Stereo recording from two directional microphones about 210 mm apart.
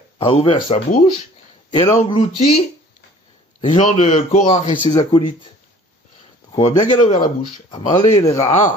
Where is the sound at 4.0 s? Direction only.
35° left (ahead or behind).